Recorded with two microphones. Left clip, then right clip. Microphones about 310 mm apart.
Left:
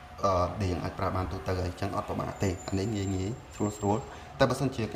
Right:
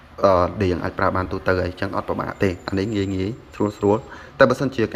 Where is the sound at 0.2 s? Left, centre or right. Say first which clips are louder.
Right 11 dB; centre.